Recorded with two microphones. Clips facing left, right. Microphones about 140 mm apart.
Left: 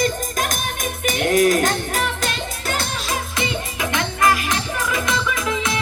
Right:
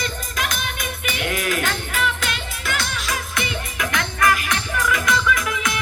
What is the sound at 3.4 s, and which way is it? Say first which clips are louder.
Music: left 2 dB; 25° left (ahead or behind).